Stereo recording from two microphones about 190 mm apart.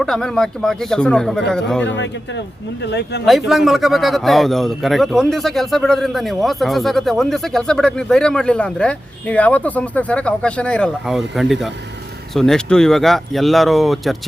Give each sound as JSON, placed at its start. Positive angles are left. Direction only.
{"t": 0.0, "sound": "a man's voice", "side_deg": 0}
{"t": 2.8, "sound": "speech", "side_deg": 60}
{"t": 3.2, "sound": "a man's voice", "side_deg": 0}